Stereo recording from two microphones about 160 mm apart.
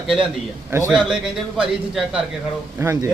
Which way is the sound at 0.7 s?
15° right (ahead or behind).